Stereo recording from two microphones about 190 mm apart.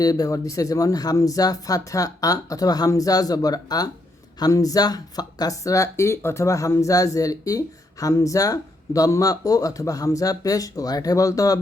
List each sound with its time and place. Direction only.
0.0 s speech: 20° left (ahead or behind)